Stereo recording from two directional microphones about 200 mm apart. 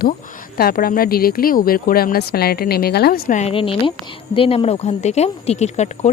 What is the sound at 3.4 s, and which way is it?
Speech, 30° left (ahead or behind).